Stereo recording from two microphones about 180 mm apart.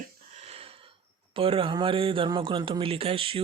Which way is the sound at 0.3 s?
35° right (ahead or behind).